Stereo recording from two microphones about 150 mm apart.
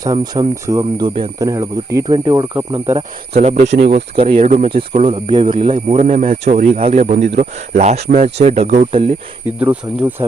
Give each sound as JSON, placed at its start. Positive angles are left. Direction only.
{"t": 0.0, "sound": "speech", "side_deg": -25}
{"t": 1.4, "sound": "speech", "side_deg": -20}
{"t": 3.4, "sound": "speech", "side_deg": -50}
{"t": 4.4, "sound": "speech", "side_deg": -55}
{"t": 4.7, "sound": "speech", "side_deg": -40}
{"t": 5.3, "sound": "speech", "side_deg": -35}
{"t": 9.6, "sound": "speech", "side_deg": -10}